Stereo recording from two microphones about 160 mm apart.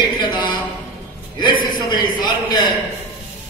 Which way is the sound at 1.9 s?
25° left (ahead or behind).